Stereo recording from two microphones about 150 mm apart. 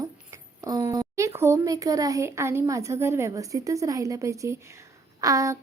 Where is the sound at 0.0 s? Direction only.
25° right (ahead or behind).